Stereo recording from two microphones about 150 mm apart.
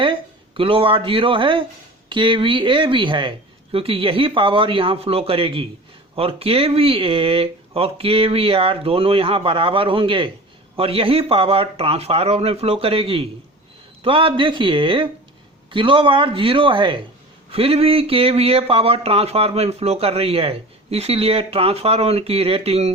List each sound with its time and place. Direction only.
0.0 s speech: 35° right (ahead or behind)